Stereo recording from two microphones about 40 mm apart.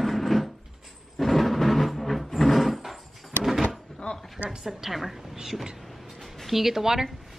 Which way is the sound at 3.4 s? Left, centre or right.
Centre.